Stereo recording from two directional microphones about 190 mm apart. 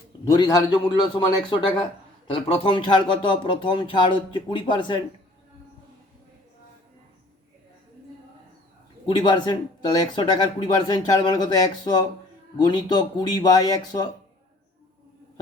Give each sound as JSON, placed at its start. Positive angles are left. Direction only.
{"t": 0.3, "sound": "a man's voice", "side_deg": 20}
{"t": 9.0, "sound": "a man's voice", "side_deg": 25}